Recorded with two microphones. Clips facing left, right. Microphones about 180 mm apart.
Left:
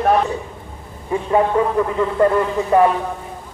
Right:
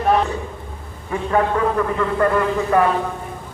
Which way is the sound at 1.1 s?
20° left (ahead or behind).